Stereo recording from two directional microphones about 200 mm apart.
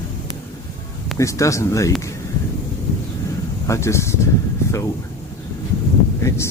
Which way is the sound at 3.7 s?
15° left (ahead or behind).